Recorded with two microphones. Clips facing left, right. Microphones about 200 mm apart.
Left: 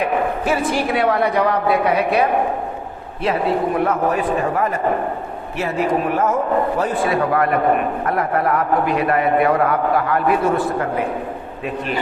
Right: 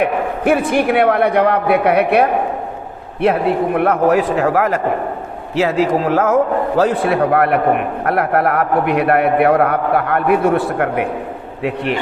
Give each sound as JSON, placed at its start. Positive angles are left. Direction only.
{"t": 0.0, "sound": "a man's voice", "side_deg": -60}
{"t": 5.5, "sound": "a man's voice", "side_deg": -90}